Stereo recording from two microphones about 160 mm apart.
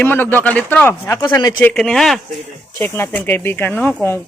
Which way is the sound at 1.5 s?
5° left (ahead or behind).